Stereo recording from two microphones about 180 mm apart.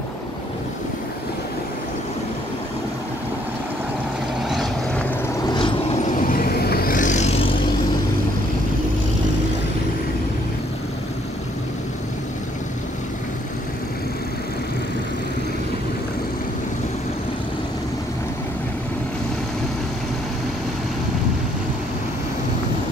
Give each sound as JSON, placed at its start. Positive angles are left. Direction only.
{"t": 4.5, "sound": "vehicle", "side_deg": 0}
{"t": 5.5, "sound": "vehicle", "side_deg": 30}
{"t": 6.2, "sound": "vehicle", "side_deg": 55}